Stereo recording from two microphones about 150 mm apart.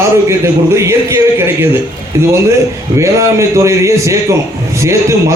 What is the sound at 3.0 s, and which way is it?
A man's voice, 20° right (ahead or behind).